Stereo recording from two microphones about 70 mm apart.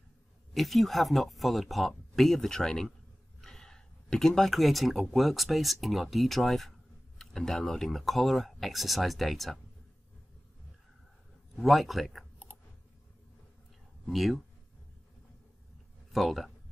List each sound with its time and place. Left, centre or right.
0.6 s speech: centre
11.5 s speech: centre
14.0 s speech: centre
16.1 s speech: centre